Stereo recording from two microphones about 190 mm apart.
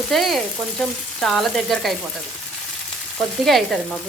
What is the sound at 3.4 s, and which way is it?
Frying, centre (ahead or behind).